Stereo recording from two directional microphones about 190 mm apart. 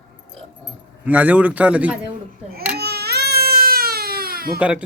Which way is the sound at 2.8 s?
60° right (ahead or behind).